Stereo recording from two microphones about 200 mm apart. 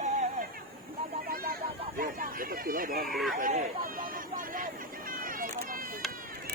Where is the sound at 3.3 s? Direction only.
40° right (ahead or behind).